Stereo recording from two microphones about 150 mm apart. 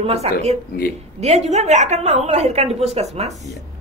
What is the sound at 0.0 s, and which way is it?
Speech, 45° right (ahead or behind).